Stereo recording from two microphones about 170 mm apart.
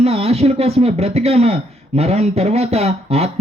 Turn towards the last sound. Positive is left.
turn(degrees=-40)  # may be behind; listen again after turning